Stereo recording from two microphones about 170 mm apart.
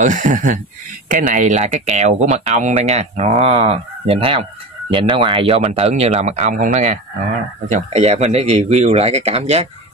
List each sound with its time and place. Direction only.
0.0 s speech: 50° right (ahead or behind)